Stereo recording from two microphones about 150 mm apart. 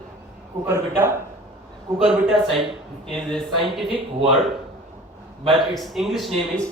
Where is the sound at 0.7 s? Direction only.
15° right (ahead or behind).